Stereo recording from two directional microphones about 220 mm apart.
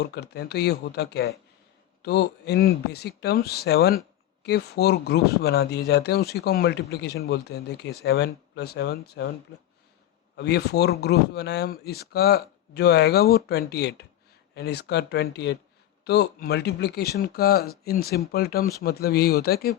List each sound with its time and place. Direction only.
0.0 s speech: 50° left (ahead or behind)
10.3 s speech: 50° left (ahead or behind)